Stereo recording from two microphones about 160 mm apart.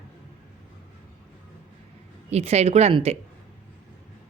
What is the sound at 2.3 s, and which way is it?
Speech, 40° right (ahead or behind).